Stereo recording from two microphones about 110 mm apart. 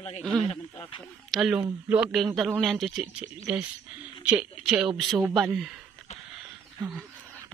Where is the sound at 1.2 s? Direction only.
Centre (ahead or behind).